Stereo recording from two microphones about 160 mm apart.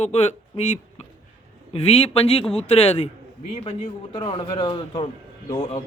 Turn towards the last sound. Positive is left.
turn(degrees=30)  # may be behind; listen again after turning